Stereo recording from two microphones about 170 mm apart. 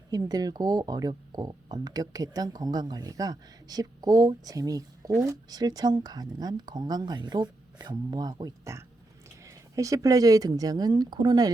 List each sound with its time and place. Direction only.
0.1 s speech: 20° right (ahead or behind)